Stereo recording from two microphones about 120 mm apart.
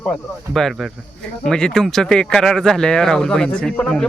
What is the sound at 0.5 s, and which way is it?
Speech, centre (ahead or behind).